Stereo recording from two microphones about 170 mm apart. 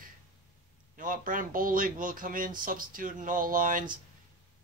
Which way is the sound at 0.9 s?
50° right (ahead or behind).